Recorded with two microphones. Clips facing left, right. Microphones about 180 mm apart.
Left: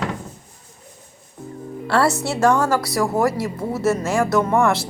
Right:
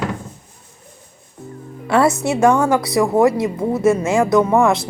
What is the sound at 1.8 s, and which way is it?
Speech, 20° right (ahead or behind).